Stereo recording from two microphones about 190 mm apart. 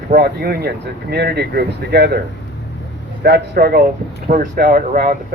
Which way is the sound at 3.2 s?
55° right (ahead or behind).